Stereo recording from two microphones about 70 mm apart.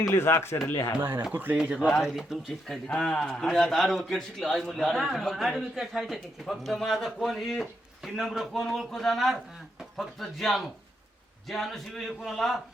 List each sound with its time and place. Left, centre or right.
0.0 s speech: left
1.3 s speech: right
1.9 s a man's voice: centre
2.6 s a man's voice: centre